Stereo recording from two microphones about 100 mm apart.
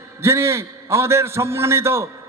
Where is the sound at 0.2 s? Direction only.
25° right (ahead or behind).